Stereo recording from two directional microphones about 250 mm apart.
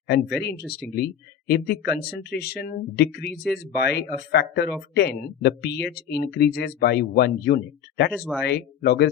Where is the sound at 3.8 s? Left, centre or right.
Left.